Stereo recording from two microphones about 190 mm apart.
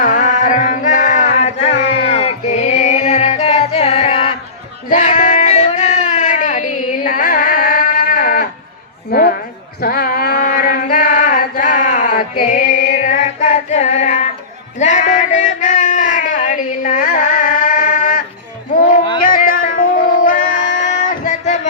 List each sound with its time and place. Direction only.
0.0 s music: 45° left (ahead or behind)
4.9 s a sound: 40° left (ahead or behind)
19.2 s music: 50° left (ahead or behind)